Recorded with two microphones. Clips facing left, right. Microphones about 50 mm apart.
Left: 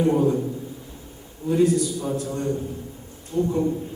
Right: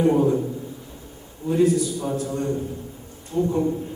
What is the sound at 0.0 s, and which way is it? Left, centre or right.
Speech, centre.